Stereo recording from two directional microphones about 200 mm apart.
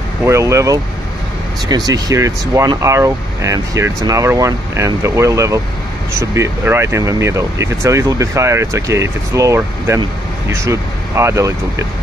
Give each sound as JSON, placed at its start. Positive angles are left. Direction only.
{"t": 0.2, "sound": "speech", "side_deg": -15}
{"t": 1.9, "sound": "speech", "side_deg": -15}